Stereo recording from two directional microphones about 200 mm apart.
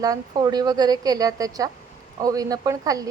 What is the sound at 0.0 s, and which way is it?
A woman's voice, 20° right (ahead or behind).